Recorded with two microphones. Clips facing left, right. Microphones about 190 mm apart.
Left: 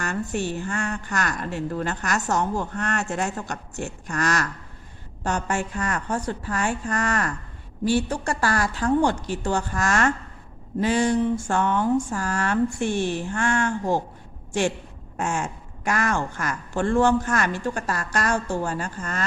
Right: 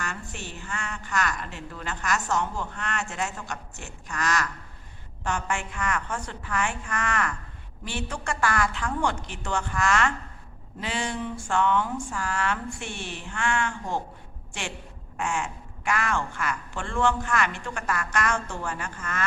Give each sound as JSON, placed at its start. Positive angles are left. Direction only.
{"t": 0.0, "sound": "a woman's voice", "side_deg": 45}
{"t": 15.2, "sound": "speech", "side_deg": 40}